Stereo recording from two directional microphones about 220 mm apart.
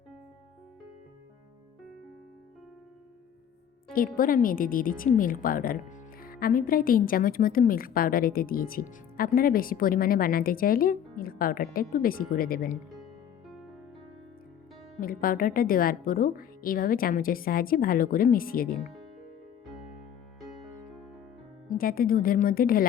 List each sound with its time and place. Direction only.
3.9 s a woman's voice: 40° left (ahead or behind)
15.0 s a woman's voice: 40° left (ahead or behind)
18.8 s speech: centre (ahead or behind)
21.7 s a woman's voice: 40° left (ahead or behind)